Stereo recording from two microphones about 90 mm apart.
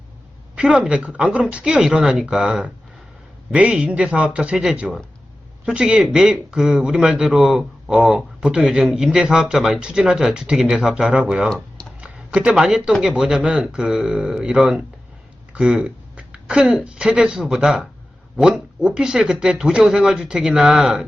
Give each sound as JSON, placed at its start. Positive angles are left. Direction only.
{"t": 0.5, "sound": "speech", "side_deg": -10}
{"t": 11.4, "sound": "tick-tock", "side_deg": 5}
{"t": 11.9, "sound": "speech", "side_deg": -10}